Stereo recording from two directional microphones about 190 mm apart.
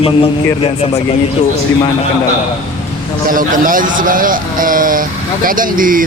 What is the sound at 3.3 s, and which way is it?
A man's voice, 45° right (ahead or behind).